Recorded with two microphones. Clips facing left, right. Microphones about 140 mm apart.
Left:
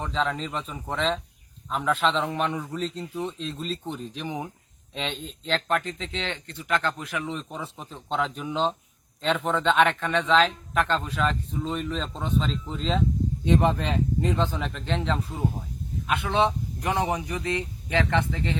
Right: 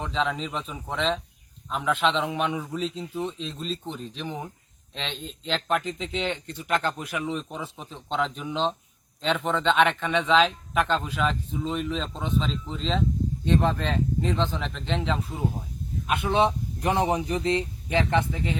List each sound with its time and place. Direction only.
0.0 s speech: centre (ahead or behind); by 7.3 s 20° right (ahead or behind)
7.3 s speech: 5° right (ahead or behind)
13.4 s speech: 15° left (ahead or behind)
16.0 s speech: 20° right (ahead or behind)